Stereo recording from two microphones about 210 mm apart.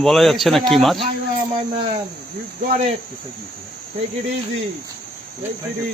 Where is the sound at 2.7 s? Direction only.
35° right (ahead or behind).